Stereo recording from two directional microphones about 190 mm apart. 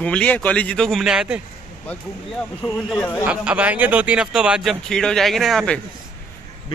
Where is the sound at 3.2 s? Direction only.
5° right (ahead or behind).